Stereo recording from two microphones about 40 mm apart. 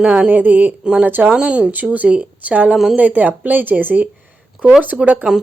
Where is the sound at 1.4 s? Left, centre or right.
Right.